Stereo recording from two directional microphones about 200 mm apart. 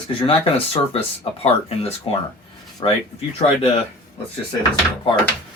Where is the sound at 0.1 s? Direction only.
25° left (ahead or behind).